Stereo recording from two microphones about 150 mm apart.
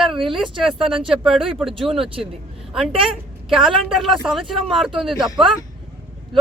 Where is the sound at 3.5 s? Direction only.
Centre (ahead or behind).